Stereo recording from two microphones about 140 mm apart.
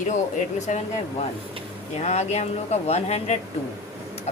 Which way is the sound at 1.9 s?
50° left (ahead or behind).